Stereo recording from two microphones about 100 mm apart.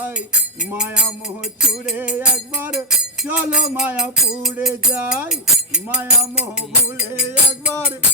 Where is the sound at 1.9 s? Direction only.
10° right (ahead or behind).